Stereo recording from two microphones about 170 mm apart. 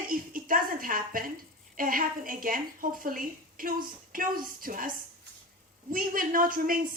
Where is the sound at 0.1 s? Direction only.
55° right (ahead or behind).